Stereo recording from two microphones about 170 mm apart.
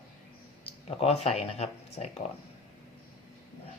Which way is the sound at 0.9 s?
40° left (ahead or behind).